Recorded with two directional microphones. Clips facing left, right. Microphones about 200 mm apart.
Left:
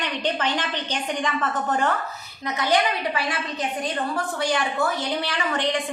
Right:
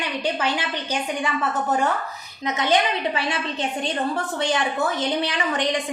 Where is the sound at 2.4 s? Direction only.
20° right (ahead or behind).